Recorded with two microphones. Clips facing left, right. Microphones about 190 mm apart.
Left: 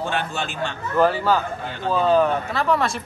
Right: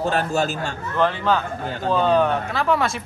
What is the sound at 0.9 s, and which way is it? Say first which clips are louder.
Speech: left 2 dB; 5° left (ahead or behind).